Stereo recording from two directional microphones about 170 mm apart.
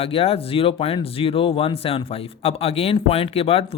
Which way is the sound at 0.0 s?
35° left (ahead or behind).